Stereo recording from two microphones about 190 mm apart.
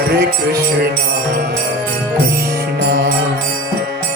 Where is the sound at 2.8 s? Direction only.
70° right (ahead or behind).